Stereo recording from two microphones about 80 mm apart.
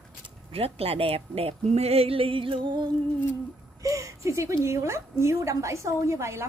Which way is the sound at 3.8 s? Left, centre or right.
Right.